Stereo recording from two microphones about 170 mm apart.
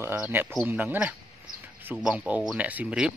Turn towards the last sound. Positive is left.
turn(degrees=-5)  # may be behind; listen again after turning